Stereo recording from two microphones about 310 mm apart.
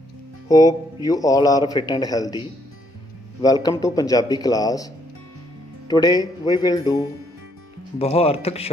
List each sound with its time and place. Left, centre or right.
0.5 s a man's voice: centre
3.4 s a man's voice: centre